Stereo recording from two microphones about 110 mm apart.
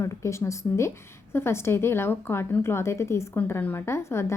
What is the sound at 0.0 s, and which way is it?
A woman's voice, 25° left (ahead or behind).